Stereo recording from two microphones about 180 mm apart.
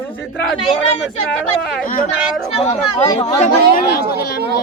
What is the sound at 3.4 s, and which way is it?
Speech, 50° left (ahead or behind).